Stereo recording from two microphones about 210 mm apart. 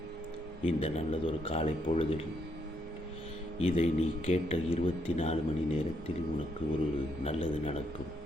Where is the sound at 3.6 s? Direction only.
30° left (ahead or behind).